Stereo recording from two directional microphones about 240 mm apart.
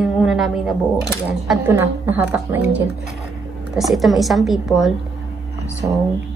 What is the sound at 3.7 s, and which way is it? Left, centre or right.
A woman's voice, centre.